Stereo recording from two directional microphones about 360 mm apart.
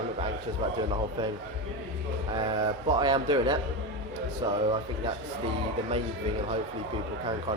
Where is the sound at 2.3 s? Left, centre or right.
Centre.